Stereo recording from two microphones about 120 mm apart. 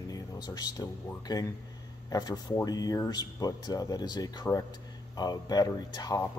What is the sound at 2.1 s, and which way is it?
Speech, 30° left (ahead or behind).